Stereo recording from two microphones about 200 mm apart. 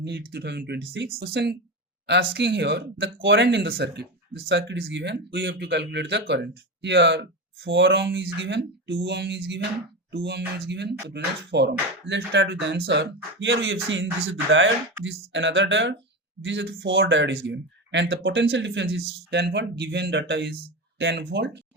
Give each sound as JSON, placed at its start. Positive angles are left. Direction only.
{"t": 0.0, "sound": "speech", "side_deg": -55}